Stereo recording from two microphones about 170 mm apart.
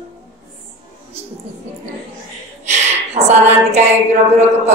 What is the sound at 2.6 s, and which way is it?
A woman's voice, 40° right (ahead or behind).